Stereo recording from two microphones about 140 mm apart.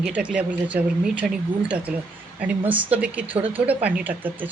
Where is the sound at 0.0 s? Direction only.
10° right (ahead or behind).